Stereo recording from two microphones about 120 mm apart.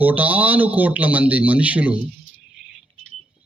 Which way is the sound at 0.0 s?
15° right (ahead or behind).